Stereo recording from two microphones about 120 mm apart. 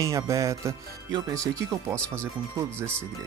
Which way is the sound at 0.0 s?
25° right (ahead or behind).